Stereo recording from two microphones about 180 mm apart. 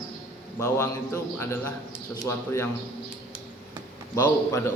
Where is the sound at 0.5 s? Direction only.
15° left (ahead or behind).